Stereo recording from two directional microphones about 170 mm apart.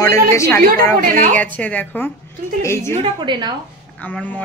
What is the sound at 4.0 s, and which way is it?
Speech, 10° left (ahead or behind).